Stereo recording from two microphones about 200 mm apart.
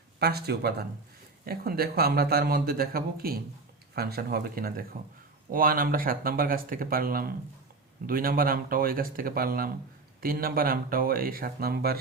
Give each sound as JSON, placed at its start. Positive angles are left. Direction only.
{"t": 0.2, "sound": "speech", "side_deg": -55}